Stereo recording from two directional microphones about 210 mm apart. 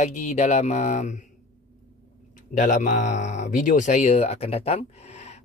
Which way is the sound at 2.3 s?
35° left (ahead or behind).